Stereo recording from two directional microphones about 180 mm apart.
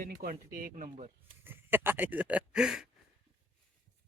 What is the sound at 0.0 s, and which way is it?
Speech, 50° right (ahead or behind).